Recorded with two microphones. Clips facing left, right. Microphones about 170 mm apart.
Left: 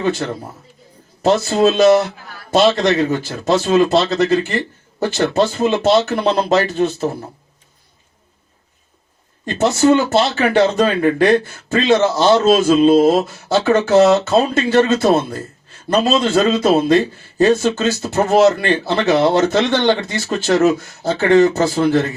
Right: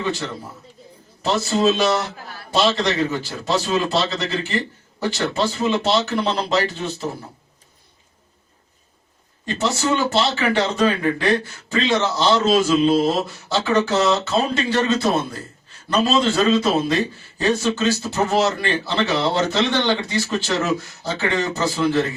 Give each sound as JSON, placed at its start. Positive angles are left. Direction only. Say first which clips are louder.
{"t": 0.0, "sound": "speech", "louder": "left 6 dB", "side_deg": 50}
{"t": 9.6, "sound": "speech", "louder": "left 8 dB", "side_deg": 50}